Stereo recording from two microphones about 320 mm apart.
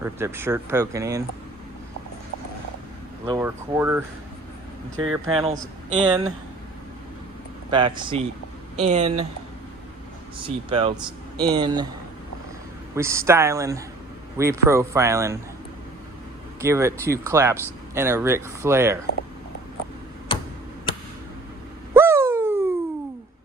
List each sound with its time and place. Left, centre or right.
0.0 s speech: centre
3.2 s speech: centre
5.0 s speech: centre
5.3 s speech: centre
7.7 s speech: centre
10.4 s speech: centre
13.0 s speech: centre
16.6 s speech: centre
20.3 s tick-tock: centre
21.9 s a sound: centre